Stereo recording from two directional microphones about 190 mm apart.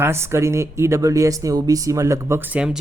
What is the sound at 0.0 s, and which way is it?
Speech, 15° right (ahead or behind).